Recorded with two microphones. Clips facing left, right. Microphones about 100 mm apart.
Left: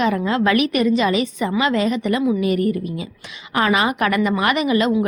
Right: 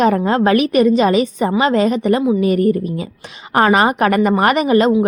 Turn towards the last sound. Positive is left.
turn(degrees=-40)  # may be behind; listen again after turning